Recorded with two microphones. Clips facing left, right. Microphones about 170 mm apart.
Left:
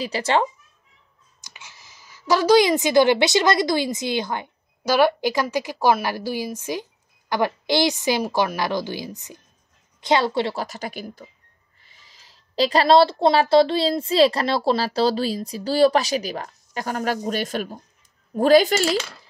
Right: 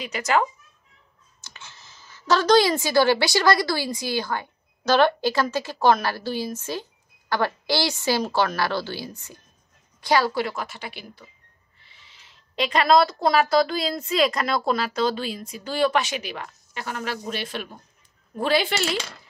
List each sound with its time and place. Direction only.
0.0 s a woman's voice: 30° left (ahead or behind)
1.4 s a woman's voice: 15° left (ahead or behind); by 18.9 s 40° left (ahead or behind)